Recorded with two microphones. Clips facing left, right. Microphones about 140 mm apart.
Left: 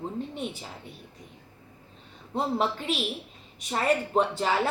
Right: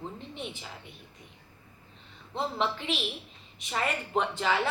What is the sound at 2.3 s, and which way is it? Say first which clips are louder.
A woman's voice: left 3 dB; 45° left (ahead or behind).